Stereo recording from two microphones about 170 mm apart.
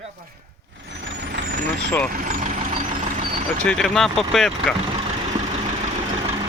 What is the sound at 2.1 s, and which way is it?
Vehicle, 50° right (ahead or behind).